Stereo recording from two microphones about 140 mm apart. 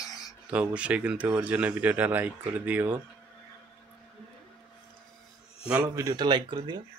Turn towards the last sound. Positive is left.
turn(degrees=-35)  # may be behind; listen again after turning